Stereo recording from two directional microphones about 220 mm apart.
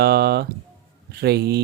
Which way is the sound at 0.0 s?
45° right (ahead or behind).